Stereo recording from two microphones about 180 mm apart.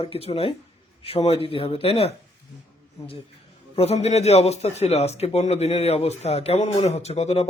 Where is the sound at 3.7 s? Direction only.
35° left (ahead or behind).